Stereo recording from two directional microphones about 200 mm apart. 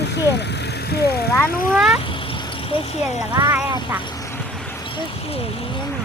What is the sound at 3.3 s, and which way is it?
Speech, 15° right (ahead or behind).